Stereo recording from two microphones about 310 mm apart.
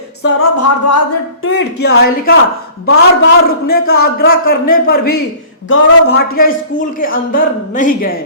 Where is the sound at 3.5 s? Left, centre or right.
Left.